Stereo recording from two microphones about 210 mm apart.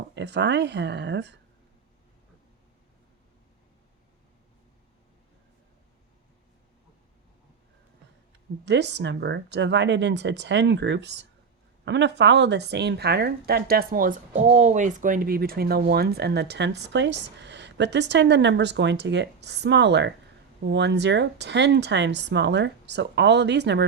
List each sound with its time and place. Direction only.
0.1 s speech: 55° right (ahead or behind)
8.6 s speech: 55° right (ahead or behind)